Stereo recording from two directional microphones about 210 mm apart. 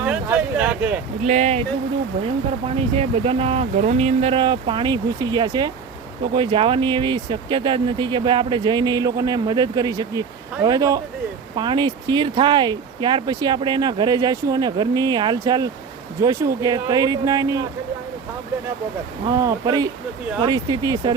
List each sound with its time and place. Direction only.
0.0 s a sound: 5° right (ahead or behind)
1.2 s speech: 35° right (ahead or behind)
2.9 s speech: 25° right (ahead or behind)
19.4 s speech: 15° right (ahead or behind)